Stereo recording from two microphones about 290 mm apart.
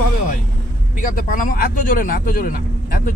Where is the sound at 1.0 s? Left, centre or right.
Left.